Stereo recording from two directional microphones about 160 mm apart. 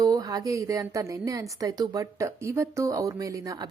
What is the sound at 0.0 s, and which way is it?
Speech, 25° right (ahead or behind).